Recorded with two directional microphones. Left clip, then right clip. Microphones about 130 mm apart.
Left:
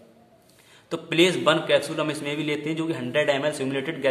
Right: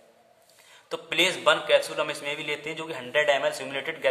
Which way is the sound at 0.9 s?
10° right (ahead or behind).